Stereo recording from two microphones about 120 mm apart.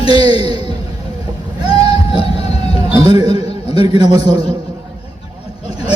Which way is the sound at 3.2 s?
55° left (ahead or behind).